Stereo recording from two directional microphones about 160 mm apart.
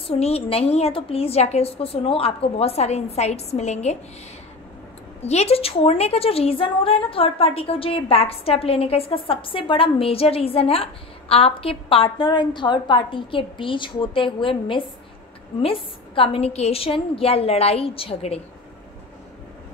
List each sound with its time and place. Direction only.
0.0 s a woman's voice: 40° left (ahead or behind)
5.2 s a woman's voice: 40° left (ahead or behind)